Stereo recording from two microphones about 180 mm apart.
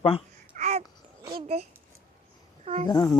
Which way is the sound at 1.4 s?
35° right (ahead or behind).